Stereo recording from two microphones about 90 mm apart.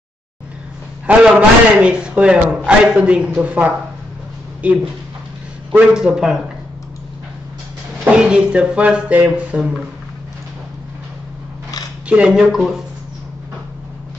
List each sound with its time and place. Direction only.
1.0 s a man's voice: 15° right (ahead or behind)
8.1 s a man's voice: 10° right (ahead or behind)
12.1 s speech: 10° right (ahead or behind)